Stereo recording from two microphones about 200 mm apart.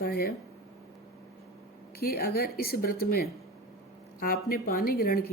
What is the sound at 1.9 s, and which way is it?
Speech, 50° left (ahead or behind).